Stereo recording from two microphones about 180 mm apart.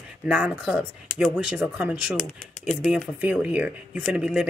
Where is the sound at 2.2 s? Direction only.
40° left (ahead or behind).